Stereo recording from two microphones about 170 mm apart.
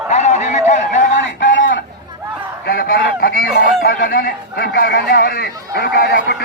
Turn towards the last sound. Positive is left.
turn(degrees=70)  # may be behind; listen again after turning